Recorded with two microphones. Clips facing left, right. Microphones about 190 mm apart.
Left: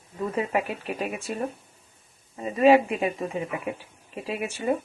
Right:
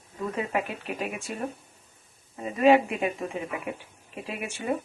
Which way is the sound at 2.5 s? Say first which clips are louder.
Left 2 dB; centre (ahead or behind).